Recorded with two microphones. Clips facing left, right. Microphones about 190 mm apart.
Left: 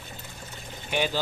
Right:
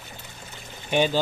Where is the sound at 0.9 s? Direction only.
20° right (ahead or behind).